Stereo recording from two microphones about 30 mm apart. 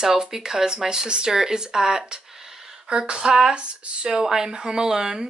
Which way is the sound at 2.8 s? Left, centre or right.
Right.